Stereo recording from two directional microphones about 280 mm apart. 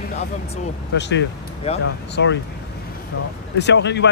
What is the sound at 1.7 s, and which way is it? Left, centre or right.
Speech, left.